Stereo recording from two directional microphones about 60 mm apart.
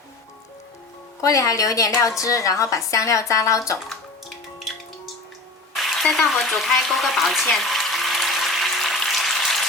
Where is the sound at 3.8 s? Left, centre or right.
Centre.